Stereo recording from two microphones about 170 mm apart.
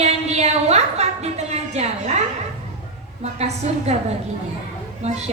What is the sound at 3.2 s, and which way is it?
Speech, 40° right (ahead or behind).